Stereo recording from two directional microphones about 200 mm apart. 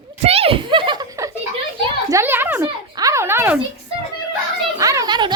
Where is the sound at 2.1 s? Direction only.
10° right (ahead or behind).